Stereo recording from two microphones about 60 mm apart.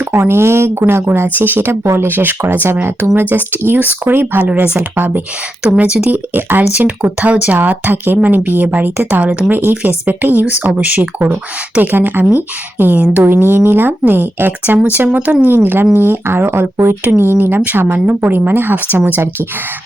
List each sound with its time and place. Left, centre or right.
0.1 s a woman's voice: right
2.0 s speech: right
5.6 s speech: right